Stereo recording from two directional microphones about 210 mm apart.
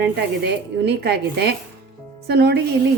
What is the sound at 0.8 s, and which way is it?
A woman's voice, 50° right (ahead or behind).